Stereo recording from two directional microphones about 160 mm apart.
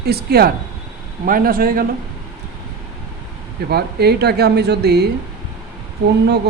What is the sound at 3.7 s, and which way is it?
Speech, 90° right.